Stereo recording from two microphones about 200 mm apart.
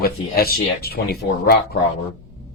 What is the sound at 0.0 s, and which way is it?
Speech, 50° left (ahead or behind).